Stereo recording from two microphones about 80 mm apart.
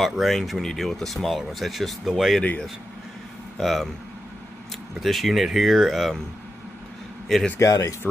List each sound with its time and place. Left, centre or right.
0.0 s speech: centre
3.5 s speech: centre
5.0 s speech: centre
7.3 s speech: centre
7.6 s speech: left